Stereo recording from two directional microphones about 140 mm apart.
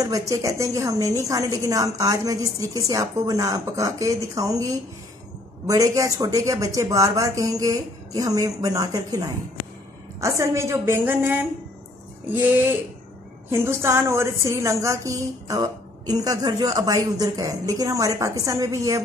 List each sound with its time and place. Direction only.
0.0 s a woman's voice: 25° right (ahead or behind)